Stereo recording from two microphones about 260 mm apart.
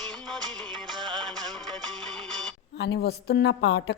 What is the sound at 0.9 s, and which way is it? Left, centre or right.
Music, centre.